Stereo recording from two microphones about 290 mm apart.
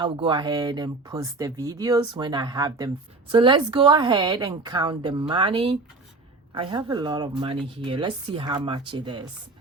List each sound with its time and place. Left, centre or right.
0.0 s speech: centre